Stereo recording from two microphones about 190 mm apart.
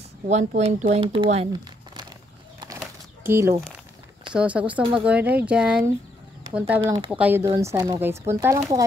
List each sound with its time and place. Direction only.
0.3 s speech: 35° right (ahead or behind)
2.8 s a sound: 10° right (ahead or behind)
4.3 s speech: 5° right (ahead or behind)
6.8 s speech: 25° right (ahead or behind)
7.1 s speech: 5° right (ahead or behind)
7.4 s speech: 20° right (ahead or behind)